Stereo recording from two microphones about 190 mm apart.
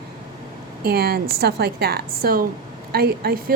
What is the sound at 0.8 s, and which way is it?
A woman's voice, 55° right (ahead or behind).